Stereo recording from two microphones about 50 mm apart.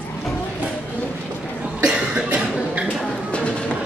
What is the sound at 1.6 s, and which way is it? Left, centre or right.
Cough, centre.